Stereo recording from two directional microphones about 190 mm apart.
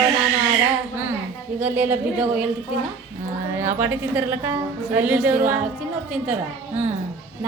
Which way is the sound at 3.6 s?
10° right (ahead or behind).